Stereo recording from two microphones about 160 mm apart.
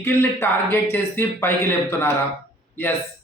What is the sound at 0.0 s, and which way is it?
Speech, 15° left (ahead or behind).